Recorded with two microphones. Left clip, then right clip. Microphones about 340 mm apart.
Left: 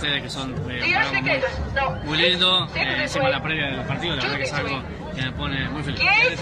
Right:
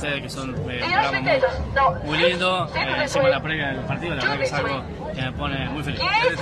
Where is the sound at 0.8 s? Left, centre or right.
Centre.